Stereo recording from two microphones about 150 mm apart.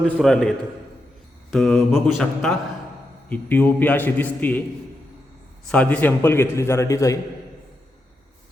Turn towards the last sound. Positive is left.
turn(degrees=20)  # may be behind; listen again after turning